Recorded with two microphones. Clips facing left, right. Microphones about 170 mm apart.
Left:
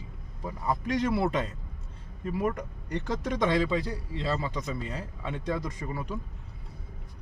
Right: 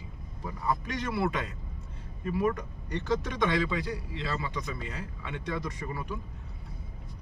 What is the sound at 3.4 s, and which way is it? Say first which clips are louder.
Speech: left 5 dB; 30° left (ahead or behind).